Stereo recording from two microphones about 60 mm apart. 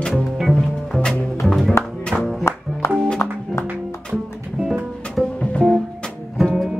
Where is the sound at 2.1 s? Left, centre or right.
Right.